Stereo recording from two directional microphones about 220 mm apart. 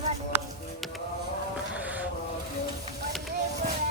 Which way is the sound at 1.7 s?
5° right (ahead or behind).